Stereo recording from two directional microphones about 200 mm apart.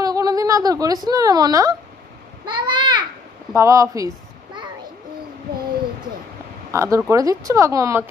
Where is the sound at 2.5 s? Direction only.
25° right (ahead or behind).